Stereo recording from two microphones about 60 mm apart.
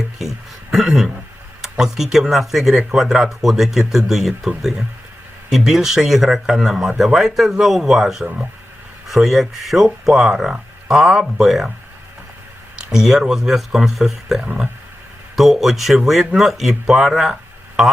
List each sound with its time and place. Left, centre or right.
0.2 s a sound: centre
1.8 s speech: centre
12.8 s speech: centre
14.4 s speech: right
15.4 s speech: centre